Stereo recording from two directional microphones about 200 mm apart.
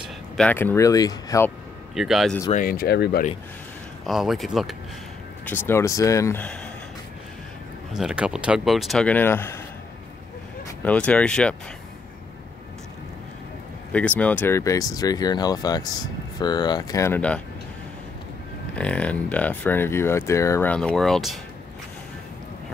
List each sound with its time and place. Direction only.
0.0 s speech: 5° left (ahead or behind)
2.0 s speech: centre (ahead or behind)
2.5 s speech: 45° left (ahead or behind)
4.0 s speech: centre (ahead or behind)
5.4 s speech: 10° left (ahead or behind)
7.9 s speech: 5° right (ahead or behind)
10.8 s speech: 5° left (ahead or behind)
13.9 s speech: 5° left (ahead or behind)
18.8 s speech: 5° left (ahead or behind)